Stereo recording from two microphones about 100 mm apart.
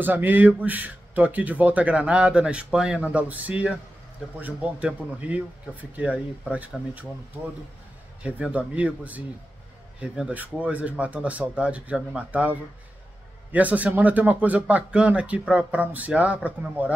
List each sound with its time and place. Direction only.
0.0 s speech: 20° right (ahead or behind)
8.2 s a man's voice: 10° right (ahead or behind)